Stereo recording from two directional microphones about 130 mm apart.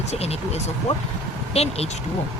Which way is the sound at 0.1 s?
55° left (ahead or behind).